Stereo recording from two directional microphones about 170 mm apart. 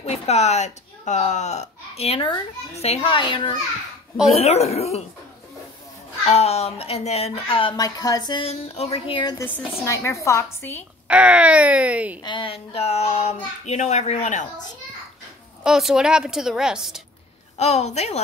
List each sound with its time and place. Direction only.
0.0 s speech: 40° left (ahead or behind)
6.2 s speech: 40° left (ahead or behind); by 8.5 s 25° left (ahead or behind)
8.5 s speech: 35° left (ahead or behind)
9.4 s a woman's voice: 15° left (ahead or behind)
11.1 s speech: 5° right (ahead or behind)
12.2 s speech: 30° left (ahead or behind); by 14.7 s 45° left (ahead or behind)
15.6 s a woman's voice: 5° right (ahead or behind)
17.6 s speech: 40° left (ahead or behind)